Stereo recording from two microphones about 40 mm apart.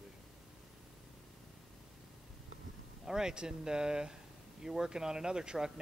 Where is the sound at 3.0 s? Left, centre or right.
Centre.